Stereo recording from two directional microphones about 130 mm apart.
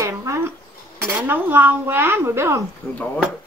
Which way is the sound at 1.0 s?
10° right (ahead or behind).